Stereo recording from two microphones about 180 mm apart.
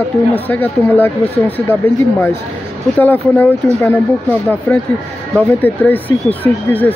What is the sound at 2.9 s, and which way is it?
Speech, 10° left (ahead or behind).